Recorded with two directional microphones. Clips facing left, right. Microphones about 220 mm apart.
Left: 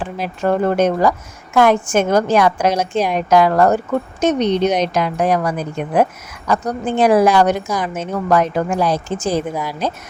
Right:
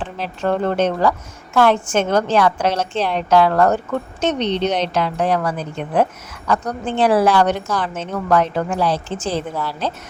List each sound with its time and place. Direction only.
0.0 s a woman's voice: 10° left (ahead or behind)